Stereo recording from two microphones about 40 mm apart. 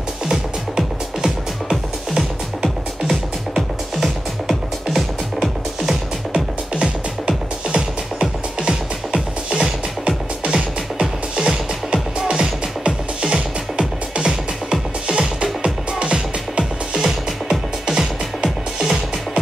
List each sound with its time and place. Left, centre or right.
0.3 s music: centre
6.3 s music: right
17.0 s music: centre